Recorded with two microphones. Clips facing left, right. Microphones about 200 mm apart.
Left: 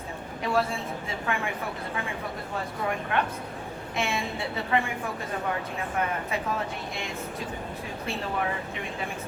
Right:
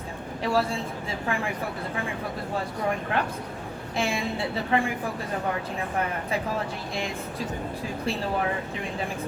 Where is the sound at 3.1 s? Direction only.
30° right (ahead or behind).